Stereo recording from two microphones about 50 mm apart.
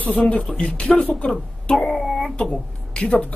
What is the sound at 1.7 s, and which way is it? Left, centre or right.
Speech, centre.